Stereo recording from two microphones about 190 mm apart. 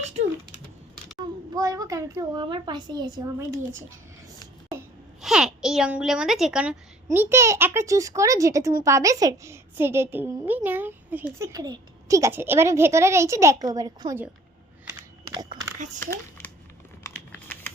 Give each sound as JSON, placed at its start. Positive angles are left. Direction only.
{"t": 1.5, "sound": "a woman's voice", "side_deg": -20}
{"t": 5.2, "sound": "a woman's voice", "side_deg": -5}
{"t": 15.4, "sound": "a sound", "side_deg": -20}
{"t": 16.0, "sound": "a child's voice", "side_deg": 15}